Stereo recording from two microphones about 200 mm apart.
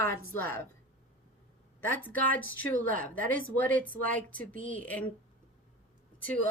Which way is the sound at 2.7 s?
45° right (ahead or behind).